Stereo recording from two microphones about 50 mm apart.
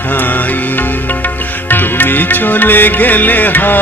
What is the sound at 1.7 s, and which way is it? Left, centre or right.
Music, left.